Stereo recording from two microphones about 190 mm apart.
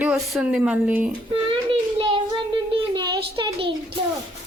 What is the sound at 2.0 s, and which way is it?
A child's voice, 30° right (ahead or behind).